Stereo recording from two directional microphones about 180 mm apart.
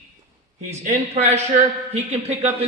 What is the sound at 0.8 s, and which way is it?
A man's voice, 40° right (ahead or behind).